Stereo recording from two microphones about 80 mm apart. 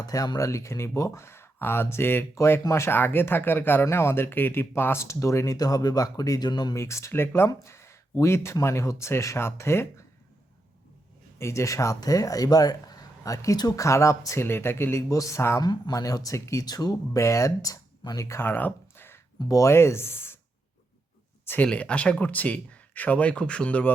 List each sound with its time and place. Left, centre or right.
0.0 s speech: left
5.5 s speech: left
6.7 s speech: left
11.3 s speech: left
13.8 s speech: left
15.1 s speech: left
15.6 s speech: left
18.3 s a sound: left
19.5 s speech: left
21.4 s speech: left